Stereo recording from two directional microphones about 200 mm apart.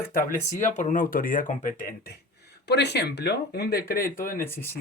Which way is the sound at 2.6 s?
55° left (ahead or behind).